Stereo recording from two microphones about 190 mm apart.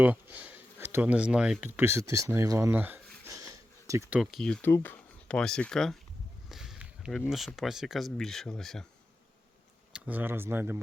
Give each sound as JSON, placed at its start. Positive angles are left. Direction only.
{"t": 0.0, "sound": "speech", "side_deg": -10}
{"t": 3.2, "sound": "a sound", "side_deg": -15}
{"t": 4.2, "sound": "speech", "side_deg": 0}
{"t": 6.5, "sound": "a sound", "side_deg": -5}
{"t": 7.3, "sound": "speech", "side_deg": 0}
{"t": 9.9, "sound": "speech", "side_deg": -10}